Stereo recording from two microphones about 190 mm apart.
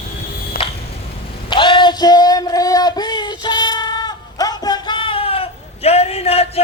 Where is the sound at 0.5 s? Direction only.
50° left (ahead or behind).